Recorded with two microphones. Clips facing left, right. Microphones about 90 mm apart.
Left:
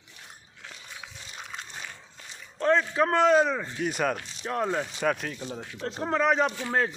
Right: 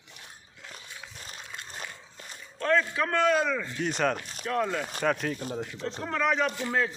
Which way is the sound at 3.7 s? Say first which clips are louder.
Right 1 dB; 5° left (ahead or behind).